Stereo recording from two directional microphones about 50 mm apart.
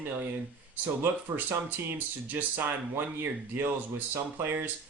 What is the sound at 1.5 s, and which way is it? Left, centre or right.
Speech, right.